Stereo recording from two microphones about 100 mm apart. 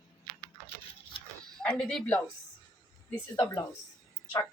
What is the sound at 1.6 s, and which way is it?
Speech, 5° left (ahead or behind).